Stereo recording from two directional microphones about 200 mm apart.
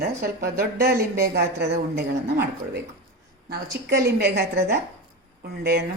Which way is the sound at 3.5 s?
50° right (ahead or behind).